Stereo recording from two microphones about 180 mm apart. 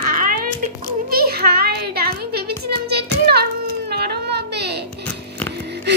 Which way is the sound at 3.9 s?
65° right (ahead or behind).